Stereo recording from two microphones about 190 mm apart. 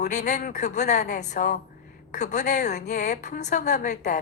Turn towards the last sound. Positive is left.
turn(degrees=40)  # may be behind; listen again after turning